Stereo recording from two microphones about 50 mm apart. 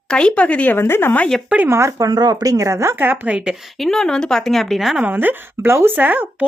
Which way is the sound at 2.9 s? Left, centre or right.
Right.